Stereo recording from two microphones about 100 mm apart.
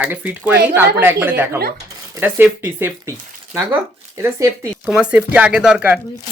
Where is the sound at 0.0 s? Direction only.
20° right (ahead or behind).